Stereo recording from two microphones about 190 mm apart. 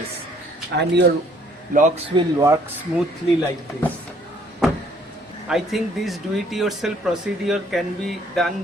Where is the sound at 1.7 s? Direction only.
45° right (ahead or behind).